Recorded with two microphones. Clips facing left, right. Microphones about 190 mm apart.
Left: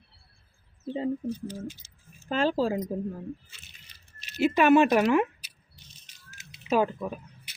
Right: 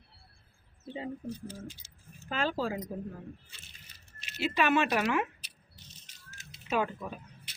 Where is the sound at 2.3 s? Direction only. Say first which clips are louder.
Left 7 dB; 40° left (ahead or behind).